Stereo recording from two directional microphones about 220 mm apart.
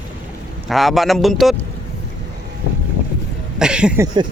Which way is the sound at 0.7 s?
Centre (ahead or behind).